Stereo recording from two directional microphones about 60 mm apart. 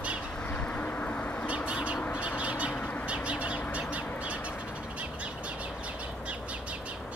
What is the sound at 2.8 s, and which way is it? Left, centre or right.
Bird, left.